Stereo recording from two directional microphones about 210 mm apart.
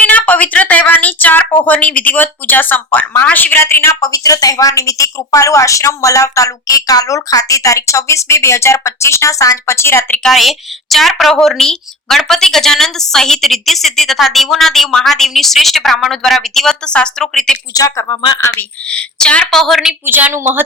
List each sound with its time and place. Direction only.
0.0 s a sound: 5° left (ahead or behind)
1.6 s a woman's voice: 5° left (ahead or behind)
10.2 s a woman's voice: centre (ahead or behind)
17.7 s speech: 15° left (ahead or behind)
18.3 s a woman's voice: 10° left (ahead or behind); by 20.6 s 10° right (ahead or behind)